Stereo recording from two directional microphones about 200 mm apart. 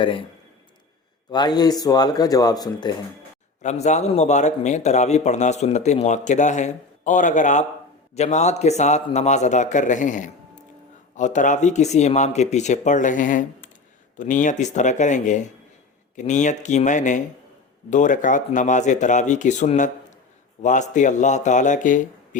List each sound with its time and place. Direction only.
0.0 s speech: 25° left (ahead or behind)
1.3 s speech: 20° left (ahead or behind)
3.6 s a man's voice: 35° left (ahead or behind)